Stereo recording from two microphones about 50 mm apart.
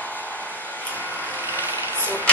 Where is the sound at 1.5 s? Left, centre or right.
Right.